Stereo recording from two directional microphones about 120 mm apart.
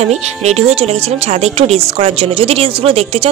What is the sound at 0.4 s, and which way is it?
Speech, 65° right (ahead or behind).